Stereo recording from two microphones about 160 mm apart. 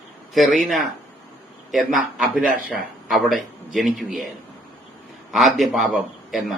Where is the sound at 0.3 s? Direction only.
Centre (ahead or behind).